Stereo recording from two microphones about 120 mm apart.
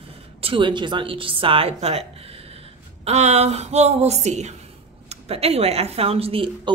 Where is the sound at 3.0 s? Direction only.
65° right (ahead or behind).